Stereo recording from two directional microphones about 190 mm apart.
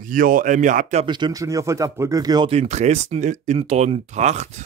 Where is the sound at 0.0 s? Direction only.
45° right (ahead or behind).